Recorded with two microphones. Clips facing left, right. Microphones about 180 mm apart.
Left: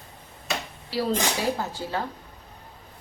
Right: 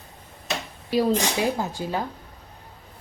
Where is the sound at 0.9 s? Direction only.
15° right (ahead or behind).